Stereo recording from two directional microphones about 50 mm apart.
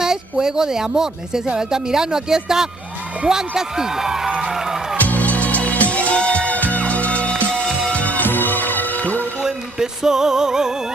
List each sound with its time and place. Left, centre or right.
0.0 s speech: centre
4.5 s music: centre
4.9 s music: left
9.4 s music: centre